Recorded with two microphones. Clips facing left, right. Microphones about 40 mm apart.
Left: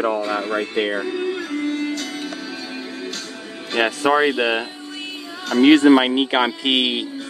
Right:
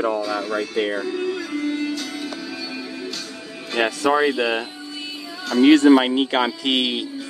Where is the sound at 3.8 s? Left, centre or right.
Left.